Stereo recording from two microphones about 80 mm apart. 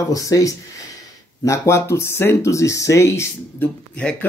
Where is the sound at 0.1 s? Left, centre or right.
Left.